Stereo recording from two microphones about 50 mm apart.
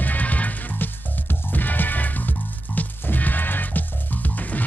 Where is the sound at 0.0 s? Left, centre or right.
Left.